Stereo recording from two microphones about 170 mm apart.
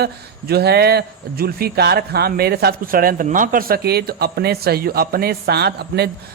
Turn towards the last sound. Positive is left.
turn(degrees=-75)  # may be behind; listen again after turning